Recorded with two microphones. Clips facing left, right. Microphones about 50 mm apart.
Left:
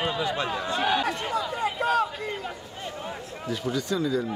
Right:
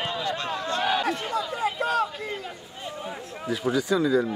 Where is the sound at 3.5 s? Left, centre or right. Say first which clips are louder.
Right 4 dB; centre.